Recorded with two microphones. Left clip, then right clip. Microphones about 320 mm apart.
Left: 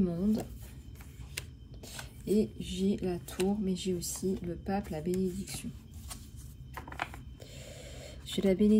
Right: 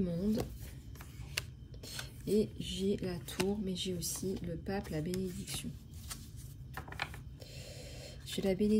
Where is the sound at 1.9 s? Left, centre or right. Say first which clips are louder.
Left 2 dB; centre.